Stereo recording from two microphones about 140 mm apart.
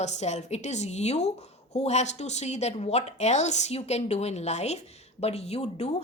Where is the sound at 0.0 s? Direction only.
55° left (ahead or behind).